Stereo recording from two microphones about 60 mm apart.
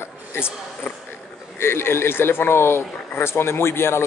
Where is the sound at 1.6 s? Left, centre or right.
Left.